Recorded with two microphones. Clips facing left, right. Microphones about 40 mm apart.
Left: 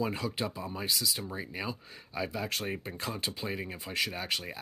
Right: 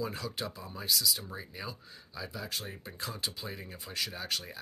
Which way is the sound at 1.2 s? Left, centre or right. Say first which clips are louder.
Left 5 dB; centre.